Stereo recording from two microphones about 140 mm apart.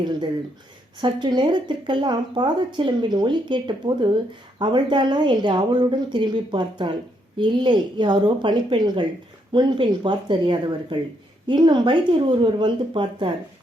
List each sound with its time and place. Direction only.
1.0 s speech: 30° right (ahead or behind)